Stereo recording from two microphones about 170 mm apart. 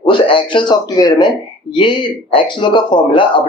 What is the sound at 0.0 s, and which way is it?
Speech, 30° left (ahead or behind).